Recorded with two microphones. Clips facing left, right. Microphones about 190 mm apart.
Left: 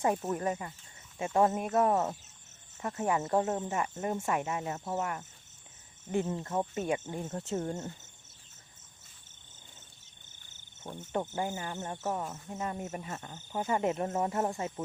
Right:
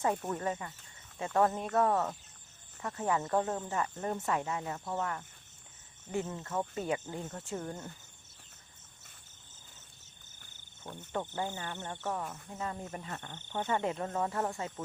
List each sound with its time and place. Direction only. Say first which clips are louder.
0.0 s speech: left 2 dB; 20° left (ahead or behind)
11.3 s speech: left 3 dB; 20° left (ahead or behind)
13.1 s speech: left 2 dB; 5° left (ahead or behind)
13.7 s speech: left 4 dB; 20° left (ahead or behind)